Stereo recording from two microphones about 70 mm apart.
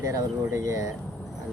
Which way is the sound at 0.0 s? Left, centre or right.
Right.